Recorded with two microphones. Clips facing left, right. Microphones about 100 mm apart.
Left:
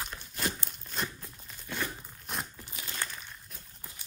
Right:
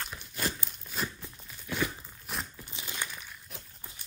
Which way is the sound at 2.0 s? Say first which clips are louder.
Even; centre (ahead or behind).